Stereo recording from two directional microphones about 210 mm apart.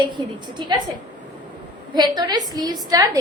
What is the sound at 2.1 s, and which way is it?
A woman's voice, 20° right (ahead or behind).